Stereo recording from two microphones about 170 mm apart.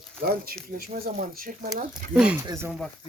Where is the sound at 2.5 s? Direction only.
15° right (ahead or behind).